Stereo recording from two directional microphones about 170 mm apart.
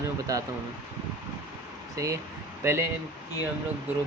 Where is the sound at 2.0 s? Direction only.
20° right (ahead or behind).